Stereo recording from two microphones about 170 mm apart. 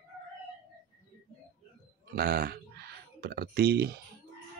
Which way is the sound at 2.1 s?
65° right (ahead or behind).